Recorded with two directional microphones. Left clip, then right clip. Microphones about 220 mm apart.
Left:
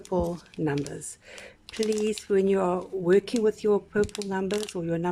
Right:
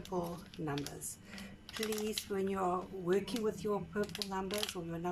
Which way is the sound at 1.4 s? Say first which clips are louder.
Left 12 dB; 40° left (ahead or behind).